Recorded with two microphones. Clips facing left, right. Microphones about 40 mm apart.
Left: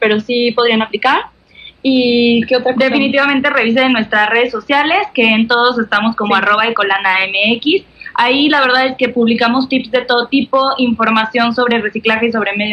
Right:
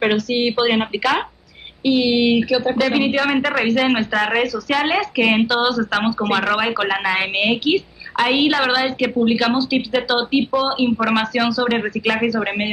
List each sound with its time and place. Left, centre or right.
0.0 s a woman's voice: left